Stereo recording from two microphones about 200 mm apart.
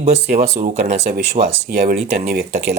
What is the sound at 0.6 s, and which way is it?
Speech, 35° right (ahead or behind).